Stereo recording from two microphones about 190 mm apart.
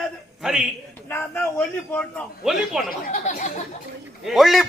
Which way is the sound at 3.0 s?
45° left (ahead or behind).